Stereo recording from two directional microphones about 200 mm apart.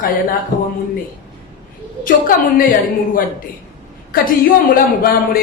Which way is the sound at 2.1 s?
45° left (ahead or behind).